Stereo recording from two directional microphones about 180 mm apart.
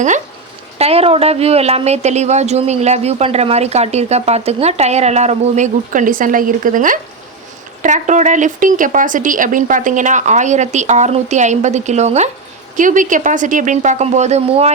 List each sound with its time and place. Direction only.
0.8 s speech: 35° right (ahead or behind)